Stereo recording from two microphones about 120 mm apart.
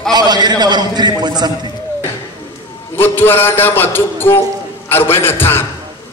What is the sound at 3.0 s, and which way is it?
A man's voice, 20° left (ahead or behind).